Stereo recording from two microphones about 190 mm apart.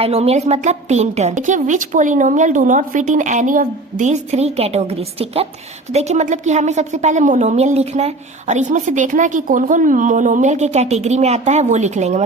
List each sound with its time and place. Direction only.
0.0 s a woman's voice: 30° right (ahead or behind)